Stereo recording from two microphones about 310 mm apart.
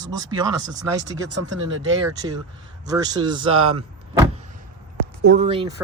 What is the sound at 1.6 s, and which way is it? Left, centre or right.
Speech, centre.